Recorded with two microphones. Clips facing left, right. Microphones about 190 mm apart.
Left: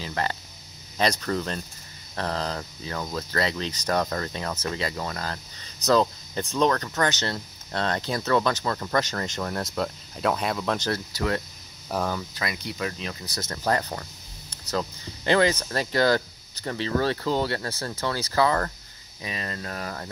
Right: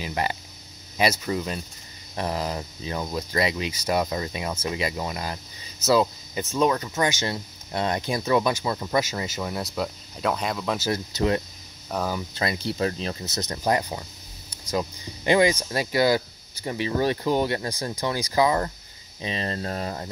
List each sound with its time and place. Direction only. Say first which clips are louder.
0.0 s speech: right 2 dB; 15° right (ahead or behind)
10.9 s speech: right 3 dB; 20° right (ahead or behind)
11.9 s speech: even; centre (ahead or behind)
12.2 s speech: right 4 dB; 25° right (ahead or behind)
19.2 s speech: right 5 dB; 30° right (ahead or behind)